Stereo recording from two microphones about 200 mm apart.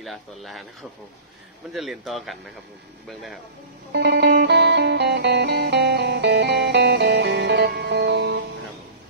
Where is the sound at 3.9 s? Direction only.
55° right (ahead or behind).